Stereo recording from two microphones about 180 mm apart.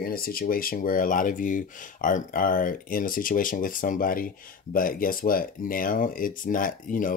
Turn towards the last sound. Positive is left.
turn(degrees=50)  # may be behind; listen again after turning